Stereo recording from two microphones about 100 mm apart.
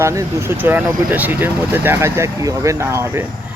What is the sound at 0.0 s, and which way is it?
Speech, 30° right (ahead or behind).